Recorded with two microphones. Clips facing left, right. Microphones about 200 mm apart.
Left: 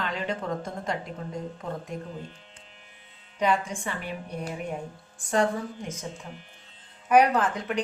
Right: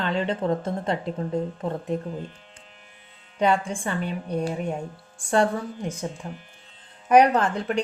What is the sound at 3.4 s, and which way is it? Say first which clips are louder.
A woman's voice: right 3 dB; 30° right (ahead or behind).